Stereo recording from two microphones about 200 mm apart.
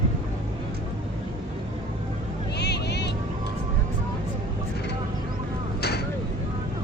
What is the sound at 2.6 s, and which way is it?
Vehicle, 60° left (ahead or behind).